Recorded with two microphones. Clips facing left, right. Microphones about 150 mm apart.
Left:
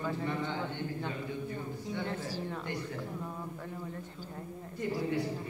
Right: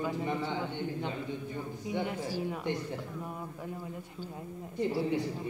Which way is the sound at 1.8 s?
15° right (ahead or behind).